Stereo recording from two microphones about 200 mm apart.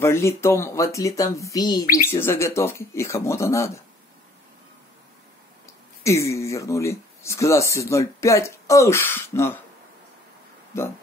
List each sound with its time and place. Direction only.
0.0 s speech: 15° left (ahead or behind)
5.7 s speech: 15° left (ahead or behind)